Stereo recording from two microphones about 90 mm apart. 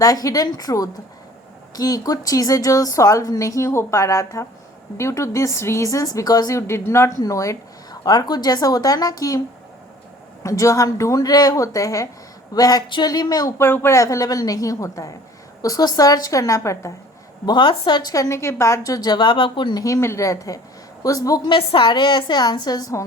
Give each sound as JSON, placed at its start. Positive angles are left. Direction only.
{"t": 0.0, "sound": "a woman's voice", "side_deg": 40}
{"t": 10.4, "sound": "a woman's voice", "side_deg": 35}
{"t": 13.6, "sound": "a woman's voice", "side_deg": 25}
{"t": 15.6, "sound": "a woman's voice", "side_deg": 45}
{"t": 17.4, "sound": "a woman's voice", "side_deg": 60}
{"t": 18.1, "sound": "a woman's voice", "side_deg": 35}
{"t": 19.8, "sound": "a woman's voice", "side_deg": 35}
{"t": 21.5, "sound": "a woman's voice", "side_deg": 75}